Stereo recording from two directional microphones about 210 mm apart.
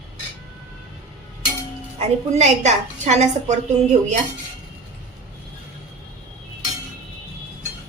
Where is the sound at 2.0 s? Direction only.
30° right (ahead or behind).